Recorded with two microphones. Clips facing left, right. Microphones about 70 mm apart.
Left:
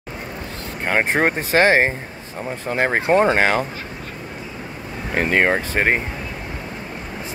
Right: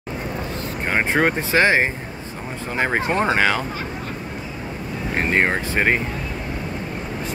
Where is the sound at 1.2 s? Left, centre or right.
Left.